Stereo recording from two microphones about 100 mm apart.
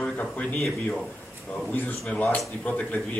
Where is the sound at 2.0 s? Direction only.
10° left (ahead or behind).